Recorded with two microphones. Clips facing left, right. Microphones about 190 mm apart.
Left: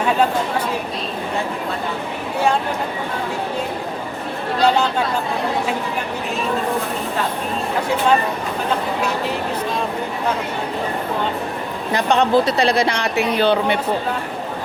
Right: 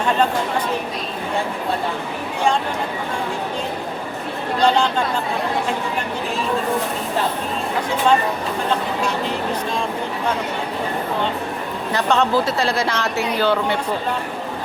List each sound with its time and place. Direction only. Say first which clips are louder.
4.6 s speech: even; 5° left (ahead or behind)
11.9 s speech: left 2 dB; 15° left (ahead or behind)